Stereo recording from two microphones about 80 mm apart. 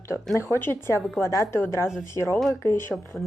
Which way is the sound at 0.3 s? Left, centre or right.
Left.